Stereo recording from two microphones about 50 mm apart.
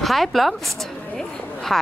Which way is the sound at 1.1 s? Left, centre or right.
Centre.